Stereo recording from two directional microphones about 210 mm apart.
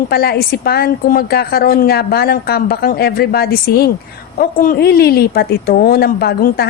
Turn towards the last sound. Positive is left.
turn(degrees=50)  # may be behind; listen again after turning